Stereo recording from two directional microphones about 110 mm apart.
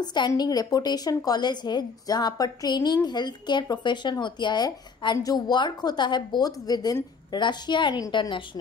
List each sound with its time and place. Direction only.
0.0 s a woman's voice: 40° left (ahead or behind)